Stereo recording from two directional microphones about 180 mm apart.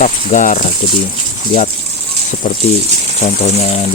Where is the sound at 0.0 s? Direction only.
45° left (ahead or behind).